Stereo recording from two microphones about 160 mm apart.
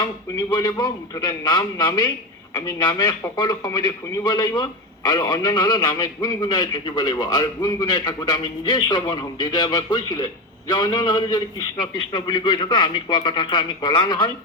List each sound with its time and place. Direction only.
0.0 s a man's voice: 25° left (ahead or behind)